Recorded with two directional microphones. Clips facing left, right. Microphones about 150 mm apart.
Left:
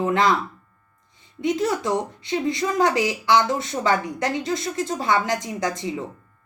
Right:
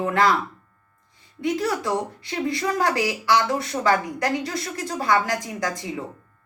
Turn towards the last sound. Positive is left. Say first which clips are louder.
# left 2 dB
turn(degrees=20)  # may be behind; listen again after turning